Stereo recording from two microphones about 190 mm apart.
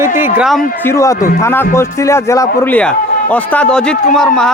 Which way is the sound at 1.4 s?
10° left (ahead or behind).